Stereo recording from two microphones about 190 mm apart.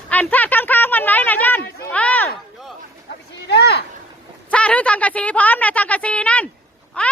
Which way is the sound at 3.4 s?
60° left (ahead or behind).